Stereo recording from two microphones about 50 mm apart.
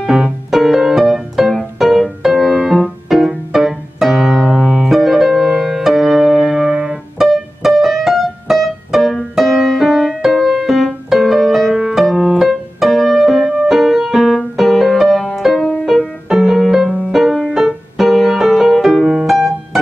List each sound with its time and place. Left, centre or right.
0.0 s music: centre
3.5 s piano: centre
4.5 s piano: centre
4.8 s piano: centre
7.2 s music: centre
10.5 s piano: centre
11.1 s music: centre
12.4 s piano: centre
13.2 s music: centre
17.5 s music: centre
17.9 s music: centre